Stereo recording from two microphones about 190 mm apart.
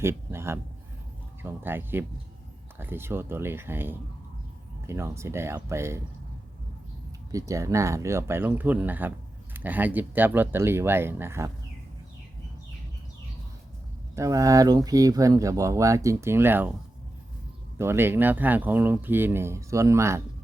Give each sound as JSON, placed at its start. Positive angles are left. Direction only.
{"t": 0.0, "sound": "a man's voice", "side_deg": -15}
{"t": 7.3, "sound": "speech", "side_deg": -15}
{"t": 14.2, "sound": "speech", "side_deg": -15}
{"t": 17.7, "sound": "speech", "side_deg": -10}